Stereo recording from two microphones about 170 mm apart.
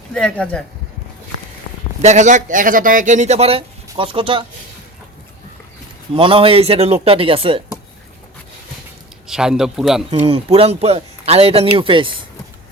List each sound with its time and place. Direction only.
0.1 s speech: 5° left (ahead or behind)
2.0 s speech: 45° right (ahead or behind)
6.1 s a man's voice: 35° right (ahead or behind)
9.2 s a man's voice: 5° right (ahead or behind)
10.2 s a man's voice: 35° right (ahead or behind)